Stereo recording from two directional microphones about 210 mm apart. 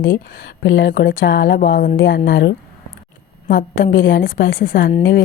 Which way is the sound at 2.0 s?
60° left (ahead or behind).